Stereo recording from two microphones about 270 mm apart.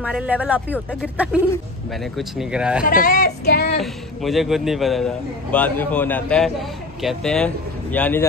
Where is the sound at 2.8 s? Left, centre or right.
Left.